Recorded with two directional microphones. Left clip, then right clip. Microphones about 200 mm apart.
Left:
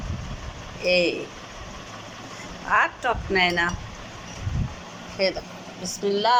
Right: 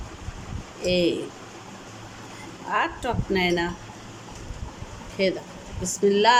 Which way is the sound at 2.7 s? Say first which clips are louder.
Left 4 dB; 20° right (ahead or behind).